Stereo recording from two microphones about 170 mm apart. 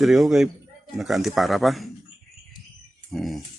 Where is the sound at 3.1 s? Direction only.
Centre (ahead or behind).